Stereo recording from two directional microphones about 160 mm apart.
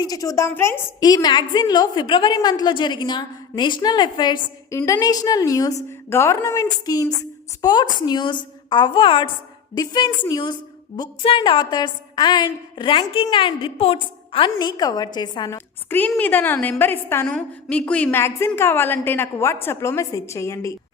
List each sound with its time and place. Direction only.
0.0 s a woman's voice: 20° left (ahead or behind)
15.5 s a woman's voice: 10° left (ahead or behind)